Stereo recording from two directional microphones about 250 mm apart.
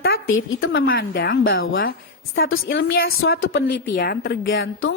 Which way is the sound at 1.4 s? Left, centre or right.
Left.